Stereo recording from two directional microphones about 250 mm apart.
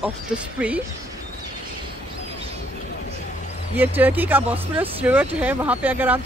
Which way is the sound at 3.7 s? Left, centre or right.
Centre.